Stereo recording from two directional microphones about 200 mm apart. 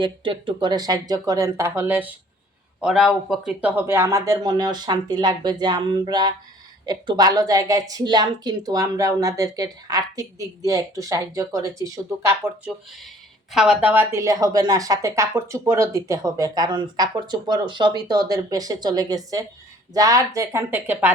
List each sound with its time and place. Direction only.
0.0 s a woman's voice: 25° right (ahead or behind)